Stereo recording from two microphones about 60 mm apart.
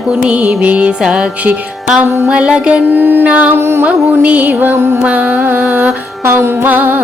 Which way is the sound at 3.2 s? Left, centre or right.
Right.